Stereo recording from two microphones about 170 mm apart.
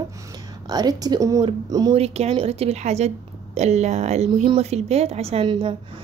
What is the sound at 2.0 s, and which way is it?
A woman's voice, 40° right (ahead or behind).